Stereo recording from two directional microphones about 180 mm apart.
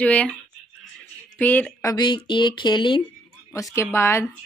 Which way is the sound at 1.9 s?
25° left (ahead or behind).